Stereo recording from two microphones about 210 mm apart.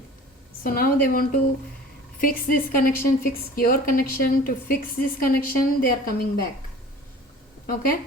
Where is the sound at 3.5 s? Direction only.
45° left (ahead or behind).